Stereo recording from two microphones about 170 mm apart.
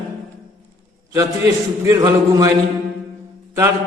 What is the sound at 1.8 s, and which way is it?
Speech, 20° right (ahead or behind).